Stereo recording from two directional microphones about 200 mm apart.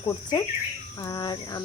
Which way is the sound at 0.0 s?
20° left (ahead or behind).